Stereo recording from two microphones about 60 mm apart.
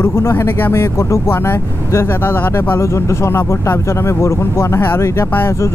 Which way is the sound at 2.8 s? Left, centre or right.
Left.